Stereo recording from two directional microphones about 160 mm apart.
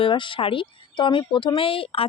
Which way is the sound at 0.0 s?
30° left (ahead or behind).